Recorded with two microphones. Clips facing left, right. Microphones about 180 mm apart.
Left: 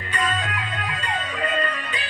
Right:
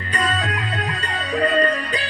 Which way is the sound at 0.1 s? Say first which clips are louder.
Right 3 dB; 35° right (ahead or behind).